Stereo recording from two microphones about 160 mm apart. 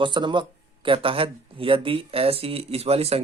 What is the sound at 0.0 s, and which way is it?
Speech, 30° right (ahead or behind).